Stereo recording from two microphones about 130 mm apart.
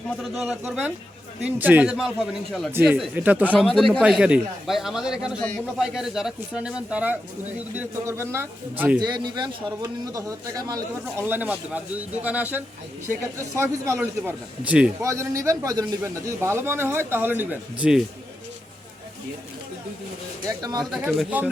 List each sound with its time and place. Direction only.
0.2 s speech: centre (ahead or behind)
0.6 s a man's voice: 15° right (ahead or behind)
2.7 s a man's voice: 15° right (ahead or behind)
3.6 s speech: centre (ahead or behind)
4.0 s a man's voice: 10° right (ahead or behind)
9.0 s a man's voice: 35° right (ahead or behind)
11.2 s a man's voice: 15° right (ahead or behind)
14.0 s a man's voice: 10° right (ahead or behind)
15.0 s a man's voice: 25° right (ahead or behind)
20.5 s a man's voice: 30° right (ahead or behind)
20.9 s speech: centre (ahead or behind)